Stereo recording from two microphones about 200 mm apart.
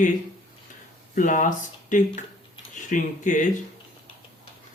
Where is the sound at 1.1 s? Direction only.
40° left (ahead or behind).